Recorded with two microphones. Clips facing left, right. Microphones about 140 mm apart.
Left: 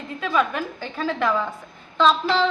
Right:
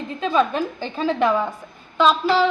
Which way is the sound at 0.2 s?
25° right (ahead or behind).